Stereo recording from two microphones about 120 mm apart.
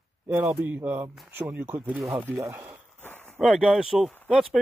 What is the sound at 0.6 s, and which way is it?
Speech, 15° right (ahead or behind).